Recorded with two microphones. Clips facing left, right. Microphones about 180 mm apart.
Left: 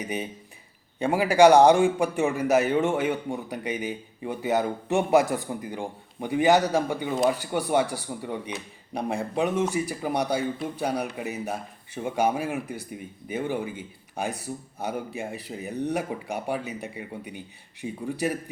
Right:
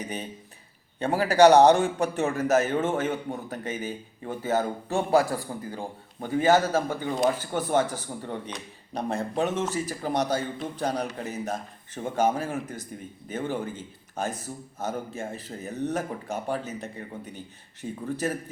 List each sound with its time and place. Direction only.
0.0 s speech: 10° left (ahead or behind)